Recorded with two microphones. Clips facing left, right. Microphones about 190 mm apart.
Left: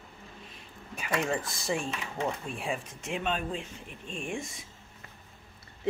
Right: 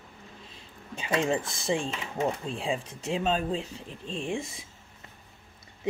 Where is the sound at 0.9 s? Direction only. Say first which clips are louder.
Right 3 dB; 25° right (ahead or behind).